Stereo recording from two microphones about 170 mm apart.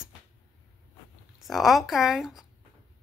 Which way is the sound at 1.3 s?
Centre (ahead or behind).